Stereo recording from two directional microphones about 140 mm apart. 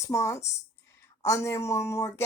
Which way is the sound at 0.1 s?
20° left (ahead or behind).